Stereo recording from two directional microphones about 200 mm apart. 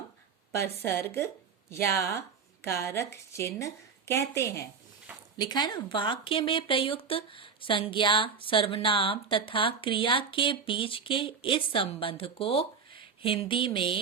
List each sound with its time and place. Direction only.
0.5 s a woman's voice: 10° left (ahead or behind)